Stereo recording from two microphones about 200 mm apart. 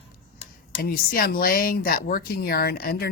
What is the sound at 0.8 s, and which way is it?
Speech, 45° left (ahead or behind).